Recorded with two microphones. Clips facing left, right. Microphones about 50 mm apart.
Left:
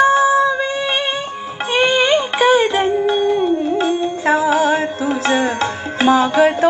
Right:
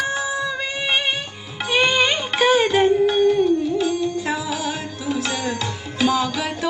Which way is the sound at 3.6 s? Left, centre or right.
Left.